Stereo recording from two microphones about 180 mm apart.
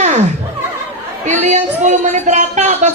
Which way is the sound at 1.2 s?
40° right (ahead or behind).